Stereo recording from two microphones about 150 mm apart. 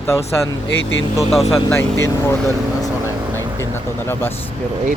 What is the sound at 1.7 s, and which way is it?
Speech, 15° left (ahead or behind).